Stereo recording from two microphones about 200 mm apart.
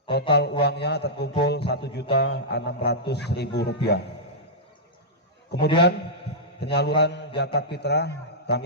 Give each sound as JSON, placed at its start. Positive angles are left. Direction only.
{"t": 0.1, "sound": "a man's voice", "side_deg": 55}
{"t": 5.6, "sound": "a man's voice", "side_deg": 55}